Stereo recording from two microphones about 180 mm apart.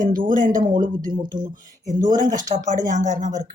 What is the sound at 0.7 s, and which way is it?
Speech, 20° right (ahead or behind).